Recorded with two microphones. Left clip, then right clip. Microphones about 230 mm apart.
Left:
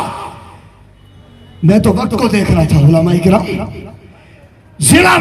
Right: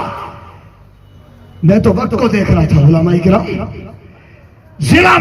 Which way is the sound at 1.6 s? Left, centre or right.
Left.